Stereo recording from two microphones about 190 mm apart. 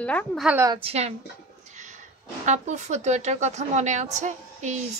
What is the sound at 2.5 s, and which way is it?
A woman's voice, 40° right (ahead or behind).